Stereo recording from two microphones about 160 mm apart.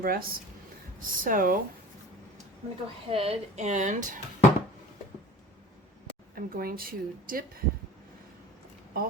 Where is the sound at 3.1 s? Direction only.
35° right (ahead or behind).